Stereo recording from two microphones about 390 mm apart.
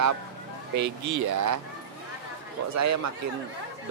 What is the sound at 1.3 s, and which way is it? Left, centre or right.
Speech, right.